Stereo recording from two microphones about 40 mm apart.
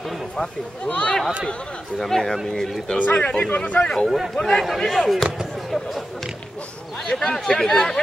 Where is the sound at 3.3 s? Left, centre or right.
Left.